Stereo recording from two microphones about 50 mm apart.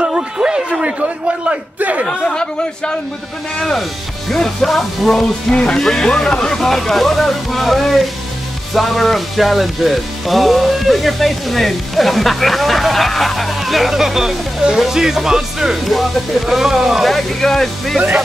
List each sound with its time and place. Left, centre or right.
0.0 s a man's voice: centre
2.0 s speech: centre
5.5 s speech: left
5.8 s speech: centre